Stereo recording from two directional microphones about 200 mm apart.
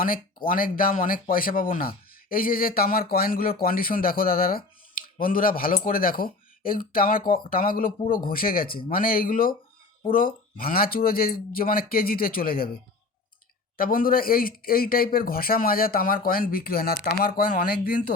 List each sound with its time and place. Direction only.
0.4 s a man's voice: 45° left (ahead or behind)
13.7 s a man's voice: 45° left (ahead or behind)